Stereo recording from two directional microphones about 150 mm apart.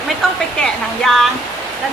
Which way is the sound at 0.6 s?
5° left (ahead or behind).